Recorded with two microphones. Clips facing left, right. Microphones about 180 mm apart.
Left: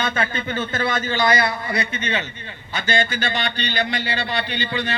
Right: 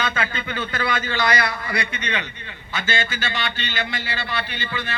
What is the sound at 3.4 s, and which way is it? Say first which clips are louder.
Speech: left 3 dB; 40° left (ahead or behind).